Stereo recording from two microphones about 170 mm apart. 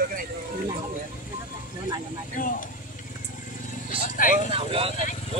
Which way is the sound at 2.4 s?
55° left (ahead or behind).